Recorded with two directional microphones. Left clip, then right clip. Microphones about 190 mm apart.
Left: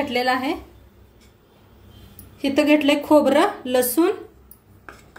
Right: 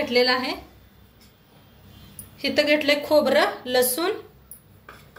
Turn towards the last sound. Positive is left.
turn(degrees=50)  # may be behind; listen again after turning